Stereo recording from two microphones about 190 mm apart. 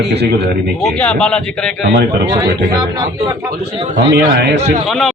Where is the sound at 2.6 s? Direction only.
20° right (ahead or behind).